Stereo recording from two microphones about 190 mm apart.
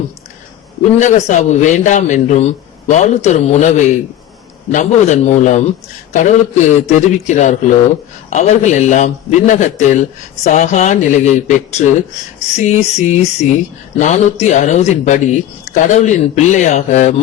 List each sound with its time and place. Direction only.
0.9 s speech: 40° left (ahead or behind)